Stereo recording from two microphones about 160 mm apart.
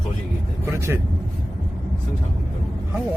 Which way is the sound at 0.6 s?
15° right (ahead or behind).